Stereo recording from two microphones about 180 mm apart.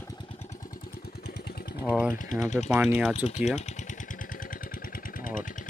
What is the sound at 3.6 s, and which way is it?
Vehicle, 40° left (ahead or behind).